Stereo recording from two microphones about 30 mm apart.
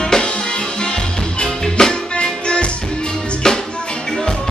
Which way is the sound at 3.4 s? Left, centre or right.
Centre.